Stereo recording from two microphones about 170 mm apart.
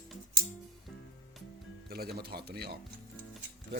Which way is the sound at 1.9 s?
65° right (ahead or behind).